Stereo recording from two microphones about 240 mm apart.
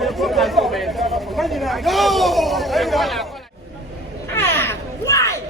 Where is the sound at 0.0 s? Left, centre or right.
Centre.